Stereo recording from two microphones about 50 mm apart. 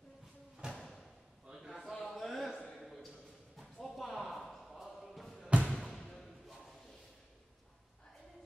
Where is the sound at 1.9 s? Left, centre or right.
Centre.